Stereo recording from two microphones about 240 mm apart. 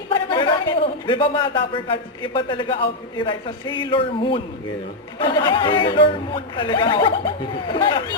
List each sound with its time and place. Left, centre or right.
0.1 s speech: centre